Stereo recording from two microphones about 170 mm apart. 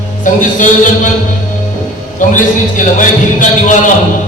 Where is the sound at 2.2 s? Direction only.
50° left (ahead or behind).